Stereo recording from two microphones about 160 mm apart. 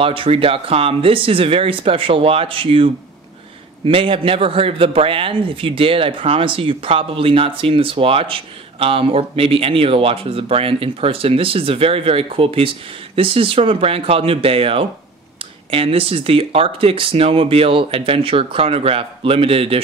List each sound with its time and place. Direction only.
0.0 s a man's voice: 35° right (ahead or behind)